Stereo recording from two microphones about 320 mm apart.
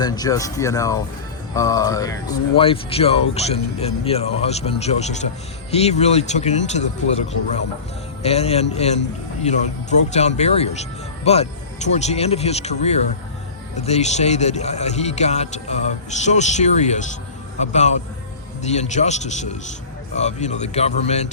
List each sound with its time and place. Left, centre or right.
0.0 s speech: centre